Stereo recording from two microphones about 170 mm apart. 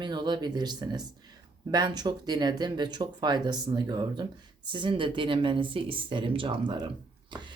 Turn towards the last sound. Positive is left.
turn(degrees=-30)  # may be behind; listen again after turning